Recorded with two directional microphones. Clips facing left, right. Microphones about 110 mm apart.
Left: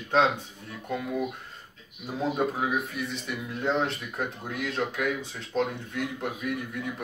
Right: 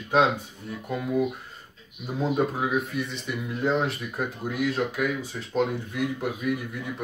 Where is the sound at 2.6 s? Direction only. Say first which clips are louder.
Right 2 dB; centre (ahead or behind).